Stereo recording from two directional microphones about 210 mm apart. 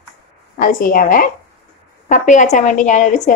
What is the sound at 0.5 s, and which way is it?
A woman's voice, 40° left (ahead or behind).